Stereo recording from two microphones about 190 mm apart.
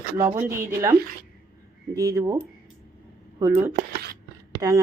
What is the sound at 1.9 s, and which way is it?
Speech, 20° right (ahead or behind).